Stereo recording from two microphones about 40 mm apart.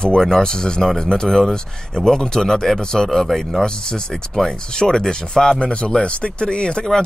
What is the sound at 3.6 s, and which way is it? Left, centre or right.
Speech, centre.